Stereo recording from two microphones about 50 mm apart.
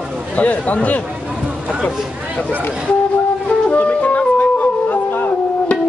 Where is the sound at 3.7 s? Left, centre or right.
Left.